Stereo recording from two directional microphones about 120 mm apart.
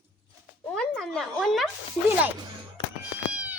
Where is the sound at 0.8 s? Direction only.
5° left (ahead or behind).